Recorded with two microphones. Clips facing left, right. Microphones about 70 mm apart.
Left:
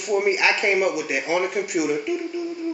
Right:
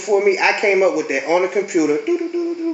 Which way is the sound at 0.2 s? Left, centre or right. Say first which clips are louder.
Right 5 dB; centre.